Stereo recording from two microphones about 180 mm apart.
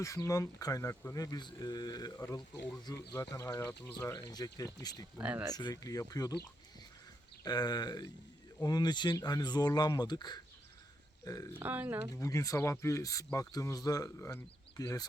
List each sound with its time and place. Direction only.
0.0 s speech: 15° left (ahead or behind)
5.1 s speech: 10° right (ahead or behind)
5.5 s speech: 20° left (ahead or behind)
7.4 s speech: 20° left (ahead or behind)
11.5 s speech: 10° right (ahead or behind)
12.1 s speech: 20° left (ahead or behind)